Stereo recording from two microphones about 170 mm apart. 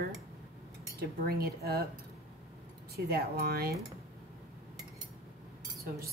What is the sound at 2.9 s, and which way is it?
Cutlery, 65° right (ahead or behind).